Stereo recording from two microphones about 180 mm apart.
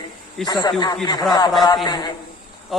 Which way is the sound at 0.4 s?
25° left (ahead or behind).